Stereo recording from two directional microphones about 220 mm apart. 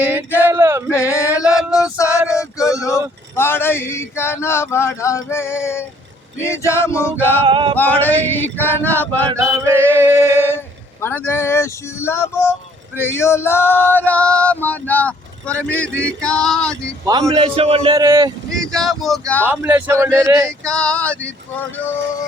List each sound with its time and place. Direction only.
0.0 s a man's voice: 10° right (ahead or behind)
0.9 s a sound: 15° left (ahead or behind)
1.7 s music: 15° left (ahead or behind)
2.4 s speech: 15° left (ahead or behind)
6.4 s male singing: 10° left (ahead or behind)
7.4 s a man's voice: 25° right (ahead or behind)
7.8 s male singing: 5° left (ahead or behind)
9.3 s a man's voice: 15° right (ahead or behind)
11.0 s male singing: 10° left (ahead or behind)
17.1 s a man's voice: 20° right (ahead or behind)
17.9 s a man's voice: 15° right (ahead or behind)
18.5 s a man's voice: centre (ahead or behind); by 20.5 s 15° right (ahead or behind)
20.7 s speech: 5° left (ahead or behind)